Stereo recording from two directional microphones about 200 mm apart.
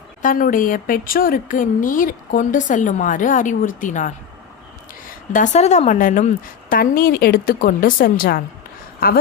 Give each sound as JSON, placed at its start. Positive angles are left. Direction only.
{"t": 0.2, "sound": "a woman's voice", "side_deg": 45}